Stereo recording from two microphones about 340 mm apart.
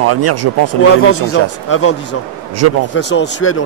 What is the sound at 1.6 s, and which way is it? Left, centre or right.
Speech, left.